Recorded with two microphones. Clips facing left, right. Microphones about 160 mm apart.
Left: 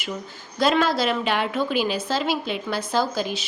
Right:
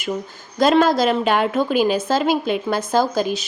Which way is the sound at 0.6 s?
45° right (ahead or behind).